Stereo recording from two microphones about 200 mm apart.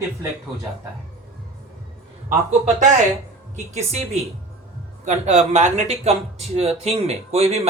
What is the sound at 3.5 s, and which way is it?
Speech, 35° right (ahead or behind).